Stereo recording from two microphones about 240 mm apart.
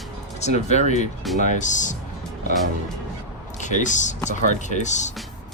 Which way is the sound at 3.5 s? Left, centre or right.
Left.